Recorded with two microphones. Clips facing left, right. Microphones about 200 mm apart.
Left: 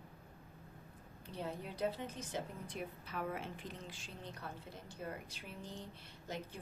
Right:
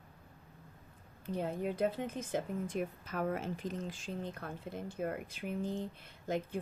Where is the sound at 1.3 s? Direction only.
50° right (ahead or behind).